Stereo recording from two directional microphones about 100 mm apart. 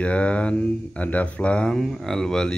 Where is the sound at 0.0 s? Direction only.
15° left (ahead or behind).